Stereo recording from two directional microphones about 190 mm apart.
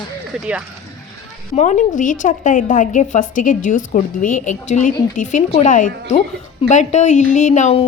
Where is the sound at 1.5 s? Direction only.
40° left (ahead or behind).